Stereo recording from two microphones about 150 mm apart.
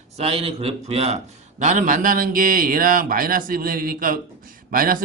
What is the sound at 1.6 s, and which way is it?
A man's voice, 55° right (ahead or behind).